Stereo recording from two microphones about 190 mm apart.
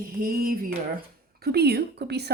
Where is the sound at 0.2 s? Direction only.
50° right (ahead or behind).